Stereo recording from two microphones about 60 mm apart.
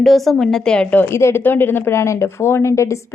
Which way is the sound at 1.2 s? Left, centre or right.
Left.